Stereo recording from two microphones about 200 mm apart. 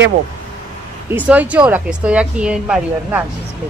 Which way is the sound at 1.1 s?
10° right (ahead or behind).